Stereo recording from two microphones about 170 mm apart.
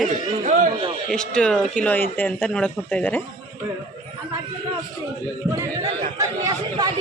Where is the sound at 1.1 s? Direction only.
5° left (ahead or behind).